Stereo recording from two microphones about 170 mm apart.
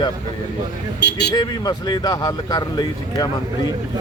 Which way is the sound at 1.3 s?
25° left (ahead or behind).